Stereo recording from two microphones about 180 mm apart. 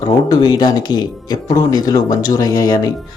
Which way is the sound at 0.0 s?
25° left (ahead or behind).